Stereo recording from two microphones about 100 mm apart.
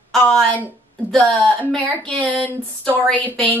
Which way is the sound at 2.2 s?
15° left (ahead or behind).